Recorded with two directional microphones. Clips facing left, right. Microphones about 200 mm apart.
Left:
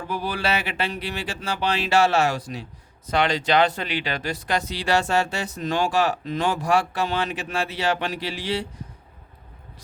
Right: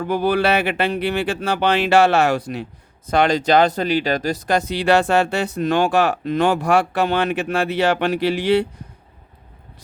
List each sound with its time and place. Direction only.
0.1 s speech: 60° right (ahead or behind)
3.1 s speech: 45° right (ahead or behind)